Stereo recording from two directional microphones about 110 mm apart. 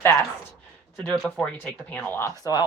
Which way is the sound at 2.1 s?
30° left (ahead or behind).